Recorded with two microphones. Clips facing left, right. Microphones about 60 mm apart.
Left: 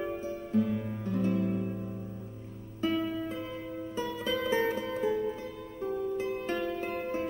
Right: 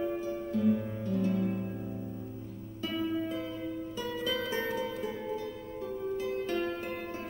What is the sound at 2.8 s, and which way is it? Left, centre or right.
Music, left.